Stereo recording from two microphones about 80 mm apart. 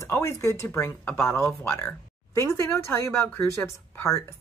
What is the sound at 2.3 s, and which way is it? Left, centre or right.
Speech, left.